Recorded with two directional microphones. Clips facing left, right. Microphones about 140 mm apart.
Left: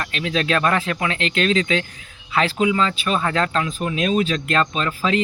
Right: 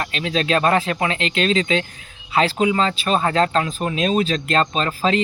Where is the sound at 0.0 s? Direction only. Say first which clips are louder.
Right 1 dB; 30° right (ahead or behind).